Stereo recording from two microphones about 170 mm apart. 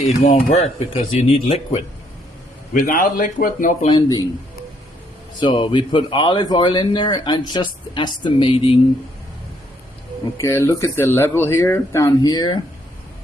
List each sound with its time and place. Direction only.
0.2 s speech: 40° left (ahead or behind)
2.7 s speech: 55° left (ahead or behind)
3.8 s speech: 25° left (ahead or behind)
5.4 s speech: 25° left (ahead or behind)
10.3 s speech: 15° left (ahead or behind)